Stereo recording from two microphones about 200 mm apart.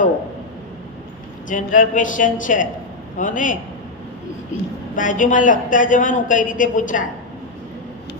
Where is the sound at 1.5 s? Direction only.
40° left (ahead or behind).